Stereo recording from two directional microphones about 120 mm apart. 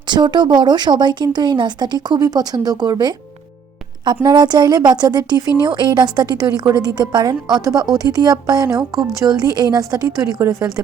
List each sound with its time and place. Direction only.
0.1 s speech: 40° right (ahead or behind)
4.3 s speech: 40° right (ahead or behind)